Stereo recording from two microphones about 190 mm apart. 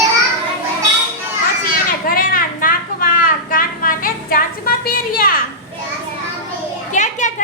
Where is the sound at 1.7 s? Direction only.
50° left (ahead or behind).